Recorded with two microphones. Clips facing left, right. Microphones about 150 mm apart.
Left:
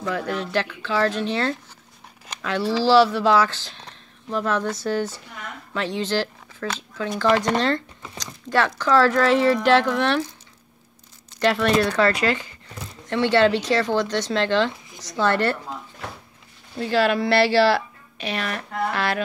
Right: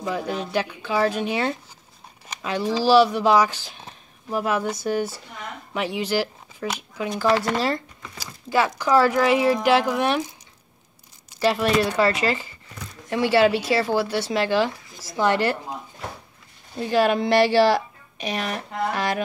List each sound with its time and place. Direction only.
0.0 s speech: 15° right (ahead or behind)
11.2 s speech: 5° right (ahead or behind)